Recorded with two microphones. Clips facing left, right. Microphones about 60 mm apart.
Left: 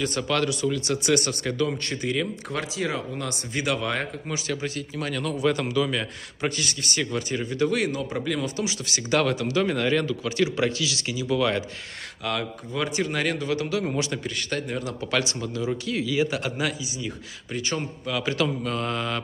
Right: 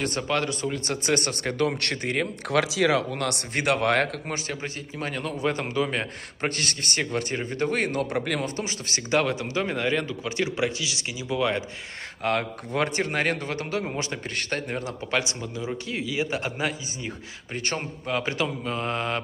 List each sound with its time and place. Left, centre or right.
0.3 s a man's voice: right
2.5 s speech: right
4.3 s a man's voice: right
12.2 s a man's voice: right
17.6 s a man's voice: right